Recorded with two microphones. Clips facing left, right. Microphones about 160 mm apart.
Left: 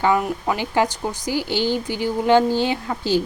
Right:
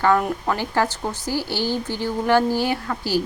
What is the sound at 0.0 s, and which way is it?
A woman's voice, 10° left (ahead or behind).